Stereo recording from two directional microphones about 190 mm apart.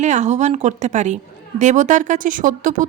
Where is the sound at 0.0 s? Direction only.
40° right (ahead or behind).